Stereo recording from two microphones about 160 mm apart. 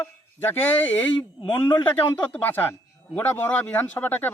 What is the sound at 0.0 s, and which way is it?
Speech, 15° left (ahead or behind).